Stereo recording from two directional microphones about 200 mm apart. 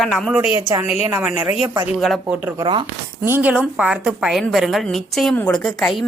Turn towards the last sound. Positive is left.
turn(degrees=0)  # may be behind; listen again after turning